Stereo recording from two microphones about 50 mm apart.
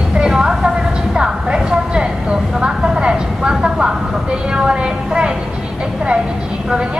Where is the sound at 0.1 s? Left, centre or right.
Centre.